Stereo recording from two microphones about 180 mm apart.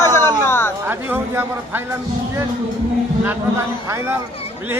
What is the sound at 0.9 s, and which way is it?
Speech, 10° right (ahead or behind).